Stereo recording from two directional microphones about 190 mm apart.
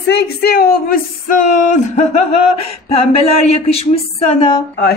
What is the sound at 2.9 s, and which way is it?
Speech, 30° left (ahead or behind).